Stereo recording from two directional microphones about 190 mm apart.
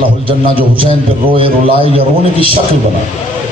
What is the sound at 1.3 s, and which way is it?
Speech, 30° right (ahead or behind).